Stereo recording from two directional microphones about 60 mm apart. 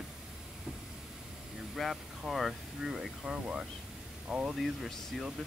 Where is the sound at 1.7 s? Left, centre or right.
Centre.